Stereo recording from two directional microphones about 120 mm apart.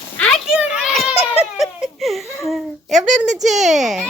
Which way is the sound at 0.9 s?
Centre (ahead or behind).